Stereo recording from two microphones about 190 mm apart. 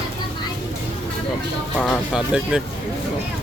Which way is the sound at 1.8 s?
Centre (ahead or behind).